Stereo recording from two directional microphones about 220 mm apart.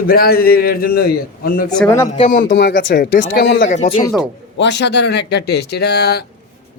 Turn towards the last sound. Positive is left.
turn(degrees=45)  # may be behind; listen again after turning